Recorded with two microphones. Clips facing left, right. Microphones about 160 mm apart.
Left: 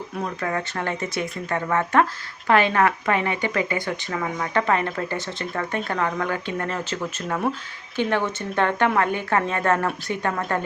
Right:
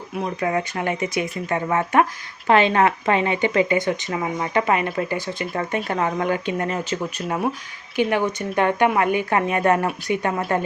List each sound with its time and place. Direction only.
0.2 s speech: 15° right (ahead or behind)